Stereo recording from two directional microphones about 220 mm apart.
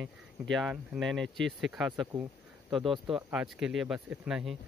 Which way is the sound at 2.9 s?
5° right (ahead or behind).